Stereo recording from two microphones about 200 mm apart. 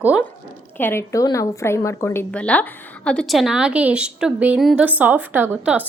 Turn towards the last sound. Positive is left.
turn(degrees=-5)  # may be behind; listen again after turning